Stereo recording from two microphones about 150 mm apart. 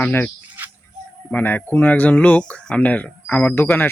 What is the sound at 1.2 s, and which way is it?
Speech, 10° left (ahead or behind).